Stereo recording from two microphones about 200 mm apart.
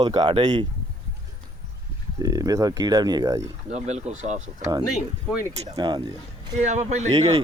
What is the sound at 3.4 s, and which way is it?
Speech, 35° right (ahead or behind).